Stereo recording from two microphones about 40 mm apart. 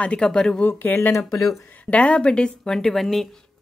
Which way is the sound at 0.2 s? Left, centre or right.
Centre.